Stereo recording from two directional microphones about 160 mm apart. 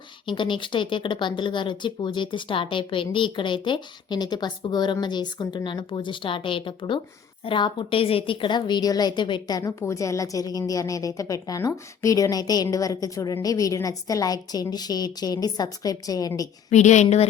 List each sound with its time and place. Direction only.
0.3 s a woman's voice: 30° left (ahead or behind)
16.6 s a woman's voice: 45° left (ahead or behind)